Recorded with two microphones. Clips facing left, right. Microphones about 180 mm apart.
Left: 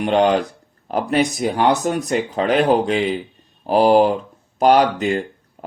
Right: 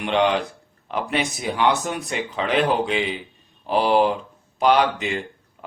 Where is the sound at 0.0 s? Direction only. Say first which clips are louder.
Left 4 dB; 40° left (ahead or behind).